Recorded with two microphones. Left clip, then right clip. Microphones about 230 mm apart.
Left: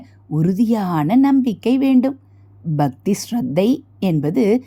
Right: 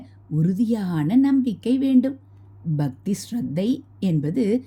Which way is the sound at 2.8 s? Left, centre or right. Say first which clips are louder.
Left 11 dB; centre.